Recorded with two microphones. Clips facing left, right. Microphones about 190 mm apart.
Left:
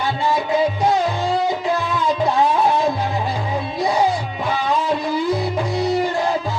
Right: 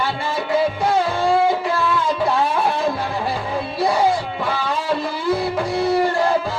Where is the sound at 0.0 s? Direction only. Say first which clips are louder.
Left 3 dB; 20° left (ahead or behind).